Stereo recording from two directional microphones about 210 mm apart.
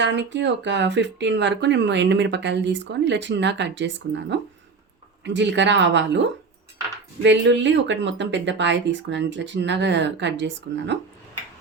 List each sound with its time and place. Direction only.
0.0 s speech: 60° right (ahead or behind)